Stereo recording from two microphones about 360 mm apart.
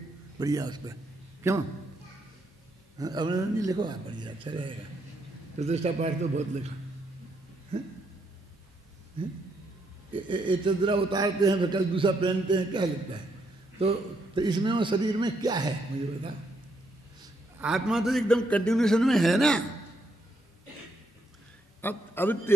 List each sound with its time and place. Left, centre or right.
0.4 s a man's voice: centre
3.0 s a man's voice: centre
10.1 s a man's voice: centre
17.6 s a man's voice: centre
21.8 s a man's voice: centre